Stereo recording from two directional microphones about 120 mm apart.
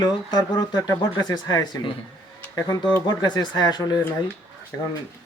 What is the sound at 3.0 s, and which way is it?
Speech, 35° left (ahead or behind).